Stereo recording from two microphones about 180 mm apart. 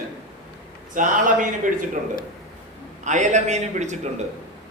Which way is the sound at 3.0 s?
40° right (ahead or behind).